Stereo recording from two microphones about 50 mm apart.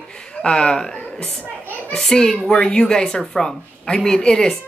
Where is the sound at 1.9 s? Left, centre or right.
Centre.